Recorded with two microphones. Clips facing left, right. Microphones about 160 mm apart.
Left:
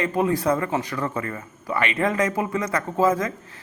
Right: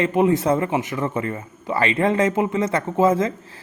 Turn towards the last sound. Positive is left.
turn(degrees=-25)  # may be behind; listen again after turning